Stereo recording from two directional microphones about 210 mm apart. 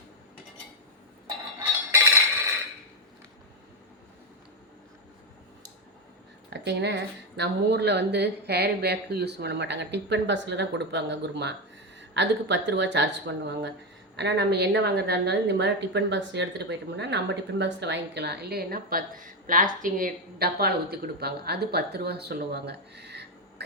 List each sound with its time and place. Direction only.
6.7 s a woman's voice: 55° right (ahead or behind)